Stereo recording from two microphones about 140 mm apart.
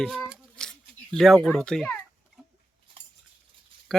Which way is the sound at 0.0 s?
Centre (ahead or behind).